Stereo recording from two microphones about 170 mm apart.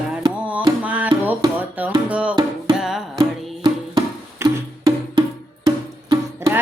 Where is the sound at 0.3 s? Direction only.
10° right (ahead or behind).